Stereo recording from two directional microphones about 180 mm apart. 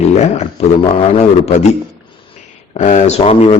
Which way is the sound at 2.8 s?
40° left (ahead or behind).